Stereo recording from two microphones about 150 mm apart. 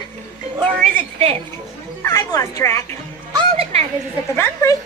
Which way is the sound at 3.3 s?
40° right (ahead or behind).